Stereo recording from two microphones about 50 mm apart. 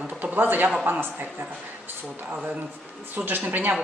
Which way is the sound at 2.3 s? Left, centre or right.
Right.